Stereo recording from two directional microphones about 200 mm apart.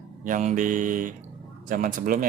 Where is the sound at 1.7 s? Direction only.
45° right (ahead or behind).